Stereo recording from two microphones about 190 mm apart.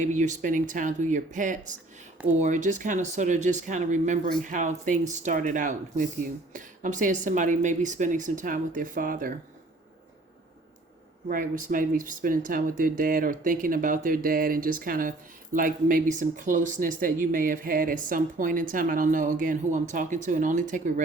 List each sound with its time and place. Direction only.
0.0 s speech: 40° right (ahead or behind)
11.3 s speech: 45° right (ahead or behind)